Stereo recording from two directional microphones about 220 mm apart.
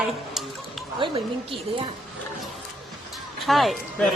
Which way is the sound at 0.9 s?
25° right (ahead or behind).